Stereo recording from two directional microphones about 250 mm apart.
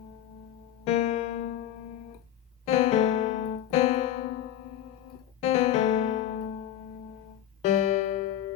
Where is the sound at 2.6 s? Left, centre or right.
Left.